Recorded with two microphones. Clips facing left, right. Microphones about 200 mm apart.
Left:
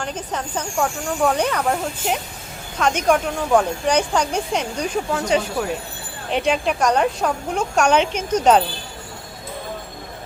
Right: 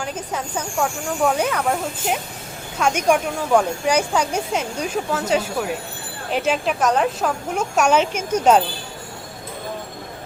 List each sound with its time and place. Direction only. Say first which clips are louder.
0.0 s a woman's voice: even; 10° right (ahead or behind)